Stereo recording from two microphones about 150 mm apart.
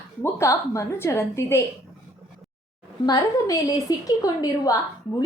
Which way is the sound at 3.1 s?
25° left (ahead or behind).